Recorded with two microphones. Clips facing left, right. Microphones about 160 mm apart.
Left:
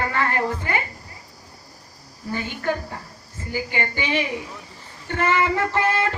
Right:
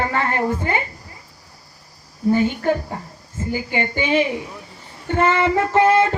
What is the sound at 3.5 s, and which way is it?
Speech, 25° right (ahead or behind).